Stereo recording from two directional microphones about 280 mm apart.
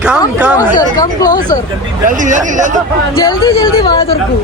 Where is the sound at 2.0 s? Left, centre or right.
Right.